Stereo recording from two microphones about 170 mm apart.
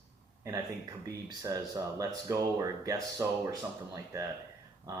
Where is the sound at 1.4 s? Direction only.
20° right (ahead or behind).